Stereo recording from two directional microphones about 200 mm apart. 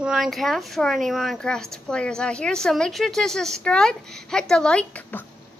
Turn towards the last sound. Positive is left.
turn(degrees=10)  # may be behind; listen again after turning